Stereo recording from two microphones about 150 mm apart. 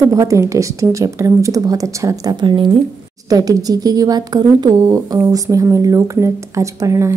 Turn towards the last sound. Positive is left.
turn(degrees=-20)  # may be behind; listen again after turning